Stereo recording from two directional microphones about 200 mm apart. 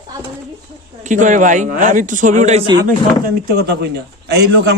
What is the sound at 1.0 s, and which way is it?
A man's voice, 40° right (ahead or behind).